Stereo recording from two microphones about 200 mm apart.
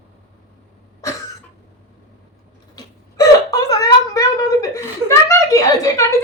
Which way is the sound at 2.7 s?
15° left (ahead or behind).